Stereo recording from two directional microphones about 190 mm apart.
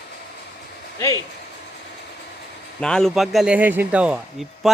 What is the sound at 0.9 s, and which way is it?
Speech, 20° left (ahead or behind).